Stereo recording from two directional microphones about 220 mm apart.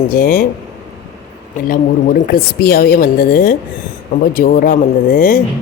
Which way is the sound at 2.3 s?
45° left (ahead or behind).